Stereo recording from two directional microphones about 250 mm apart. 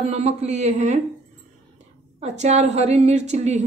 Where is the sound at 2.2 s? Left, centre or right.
Right.